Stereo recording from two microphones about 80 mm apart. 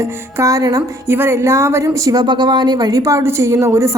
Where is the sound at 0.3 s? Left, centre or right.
Right.